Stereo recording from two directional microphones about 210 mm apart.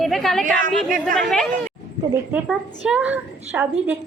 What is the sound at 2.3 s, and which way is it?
A woman's voice, 5° right (ahead or behind).